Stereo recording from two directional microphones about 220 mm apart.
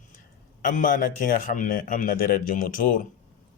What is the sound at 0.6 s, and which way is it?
A man's voice, 35° left (ahead or behind).